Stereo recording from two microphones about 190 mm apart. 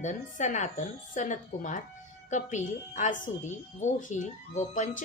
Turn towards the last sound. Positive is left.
turn(degrees=40)  # may be behind; listen again after turning